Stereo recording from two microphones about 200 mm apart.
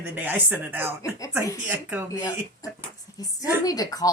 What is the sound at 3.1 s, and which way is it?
Speech, 15° left (ahead or behind).